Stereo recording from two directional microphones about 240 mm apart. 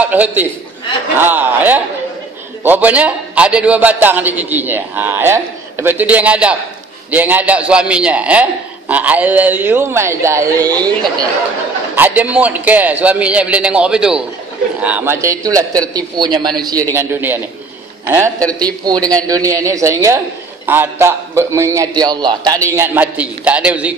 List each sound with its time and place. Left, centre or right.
0.0 s a man's voice: centre
11.9 s a man's voice: centre